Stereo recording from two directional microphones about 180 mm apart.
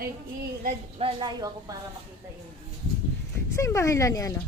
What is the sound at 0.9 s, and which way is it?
Speech, 30° right (ahead or behind).